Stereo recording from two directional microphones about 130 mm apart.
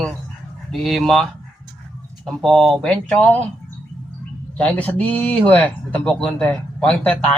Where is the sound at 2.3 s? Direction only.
Centre (ahead or behind).